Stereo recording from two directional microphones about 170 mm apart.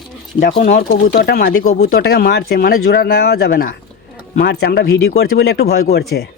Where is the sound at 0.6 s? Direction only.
55° left (ahead or behind).